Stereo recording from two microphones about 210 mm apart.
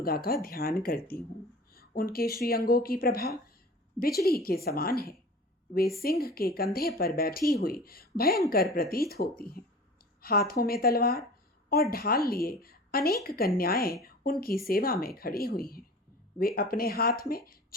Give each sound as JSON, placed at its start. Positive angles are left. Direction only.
{"t": 0.0, "sound": "a woman's voice", "side_deg": 45}